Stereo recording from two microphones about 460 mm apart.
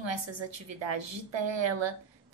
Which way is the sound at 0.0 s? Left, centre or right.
Right.